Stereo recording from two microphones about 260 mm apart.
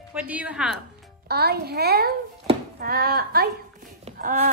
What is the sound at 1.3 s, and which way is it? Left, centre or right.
Speech, right.